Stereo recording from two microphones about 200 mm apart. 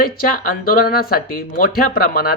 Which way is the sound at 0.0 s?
45° left (ahead or behind).